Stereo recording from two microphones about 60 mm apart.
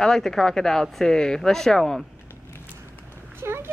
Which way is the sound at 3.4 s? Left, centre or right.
Right.